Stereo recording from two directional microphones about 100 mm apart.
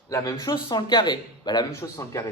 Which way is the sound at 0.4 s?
45° left (ahead or behind).